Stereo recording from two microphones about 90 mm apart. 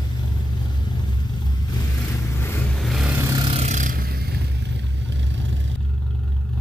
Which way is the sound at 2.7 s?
Centre (ahead or behind).